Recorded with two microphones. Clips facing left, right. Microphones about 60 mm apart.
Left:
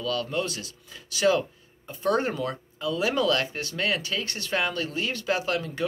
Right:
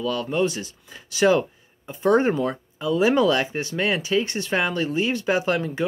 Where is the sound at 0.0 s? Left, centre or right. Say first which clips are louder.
Right 5 dB; right.